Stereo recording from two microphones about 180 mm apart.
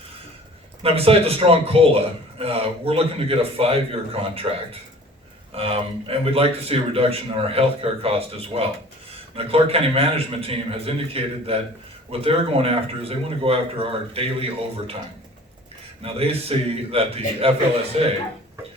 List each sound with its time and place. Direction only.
0.8 s a man's voice: 30° right (ahead or behind)
16.0 s a man's voice: 35° right (ahead or behind)